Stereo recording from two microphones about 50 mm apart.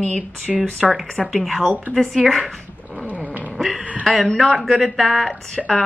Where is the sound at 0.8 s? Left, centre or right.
Centre.